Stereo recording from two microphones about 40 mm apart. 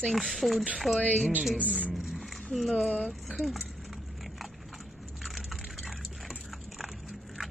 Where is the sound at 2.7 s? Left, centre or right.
Left.